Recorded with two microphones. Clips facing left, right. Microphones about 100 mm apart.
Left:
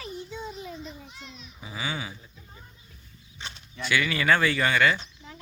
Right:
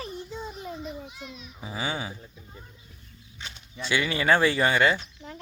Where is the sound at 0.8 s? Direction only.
10° right (ahead or behind).